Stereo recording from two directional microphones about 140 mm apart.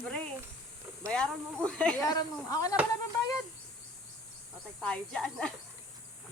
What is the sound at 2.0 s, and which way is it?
Speech, 25° left (ahead or behind).